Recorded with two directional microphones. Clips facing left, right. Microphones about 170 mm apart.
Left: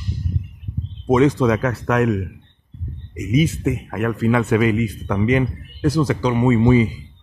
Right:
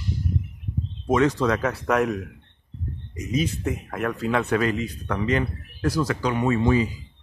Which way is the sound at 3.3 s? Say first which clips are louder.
Left 6 dB; 5° left (ahead or behind).